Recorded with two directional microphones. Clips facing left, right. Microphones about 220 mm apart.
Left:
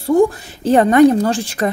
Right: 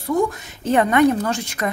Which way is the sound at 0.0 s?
30° left (ahead or behind).